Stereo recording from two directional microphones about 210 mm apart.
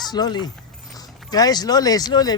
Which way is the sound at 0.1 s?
20° left (ahead or behind).